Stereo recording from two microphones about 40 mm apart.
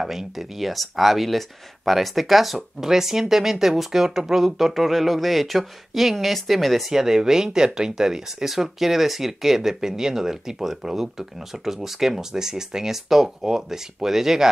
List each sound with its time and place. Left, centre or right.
0.0 s speech: centre
6.9 s speech: centre